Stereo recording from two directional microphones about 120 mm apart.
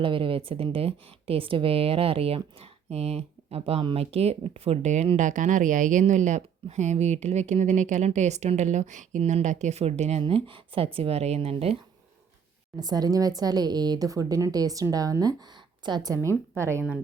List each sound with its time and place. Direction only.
0.0 s a woman's voice: 45° right (ahead or behind); by 5.0 s 70° right (ahead or behind)
5.1 s a woman's voice: 90° right; by 11.8 s 55° right (ahead or behind)
12.8 s a woman's voice: 35° right (ahead or behind)
16.6 s speech: 20° right (ahead or behind)